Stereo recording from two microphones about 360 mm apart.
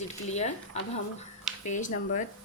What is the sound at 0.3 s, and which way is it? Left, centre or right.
Speech, centre.